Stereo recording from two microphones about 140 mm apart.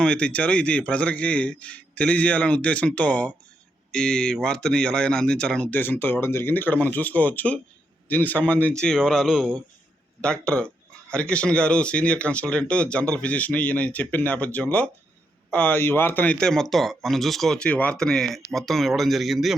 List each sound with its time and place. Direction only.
0.0 s speech: 10° left (ahead or behind)